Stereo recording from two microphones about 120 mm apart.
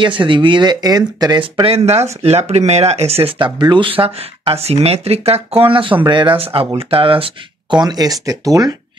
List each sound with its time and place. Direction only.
0.0 s speech: 45° right (ahead or behind)
5.6 s speech: 45° right (ahead or behind)
7.8 s speech: 30° right (ahead or behind)